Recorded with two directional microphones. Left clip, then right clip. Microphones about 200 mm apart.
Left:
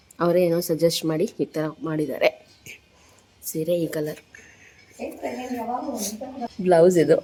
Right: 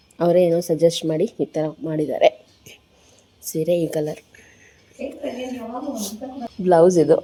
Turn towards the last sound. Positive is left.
turn(degrees=-5)  # may be behind; listen again after turning